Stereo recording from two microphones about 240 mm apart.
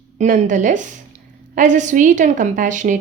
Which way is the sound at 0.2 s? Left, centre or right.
Right.